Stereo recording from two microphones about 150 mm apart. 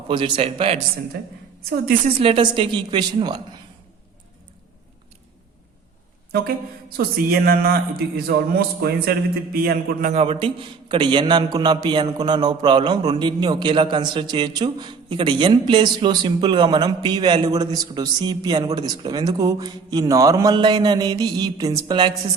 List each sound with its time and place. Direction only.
0.1 s a woman's voice: 35° right (ahead or behind)
2.1 s a woman's voice: 40° right (ahead or behind)
6.9 s a man's voice: 90° right
10.1 s a man's voice: 40° right (ahead or behind)